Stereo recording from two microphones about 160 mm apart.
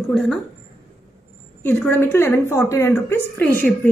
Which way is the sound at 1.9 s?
15° left (ahead or behind).